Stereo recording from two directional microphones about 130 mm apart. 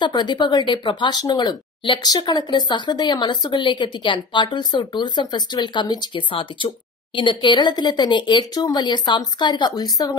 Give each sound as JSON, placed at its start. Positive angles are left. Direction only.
{"t": 0.0, "sound": "speech", "side_deg": 35}